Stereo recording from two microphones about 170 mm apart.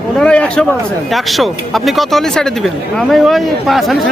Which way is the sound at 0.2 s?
5° left (ahead or behind).